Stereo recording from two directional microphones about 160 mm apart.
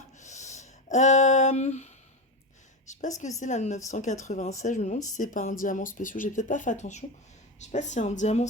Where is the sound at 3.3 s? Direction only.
45° left (ahead or behind).